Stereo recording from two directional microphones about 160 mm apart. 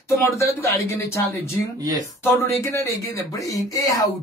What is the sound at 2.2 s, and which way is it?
Speech, 15° left (ahead or behind).